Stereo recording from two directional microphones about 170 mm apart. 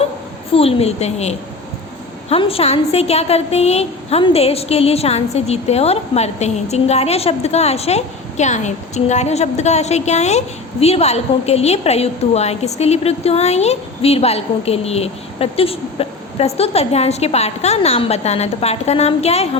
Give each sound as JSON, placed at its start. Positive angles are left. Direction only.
{"t": 0.5, "sound": "a woman's voice", "side_deg": 35}